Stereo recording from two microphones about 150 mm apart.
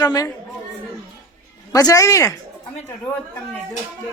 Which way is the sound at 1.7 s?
20° left (ahead or behind).